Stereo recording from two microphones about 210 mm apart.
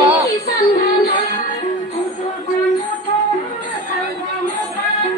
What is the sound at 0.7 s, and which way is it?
Music, 45° left (ahead or behind).